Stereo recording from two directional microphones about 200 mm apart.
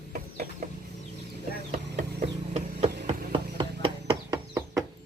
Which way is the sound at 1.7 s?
45° right (ahead or behind).